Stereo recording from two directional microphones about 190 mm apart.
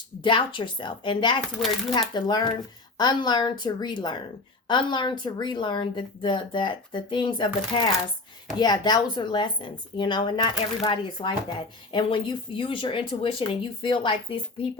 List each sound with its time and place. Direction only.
0.2 s speech: 25° left (ahead or behind)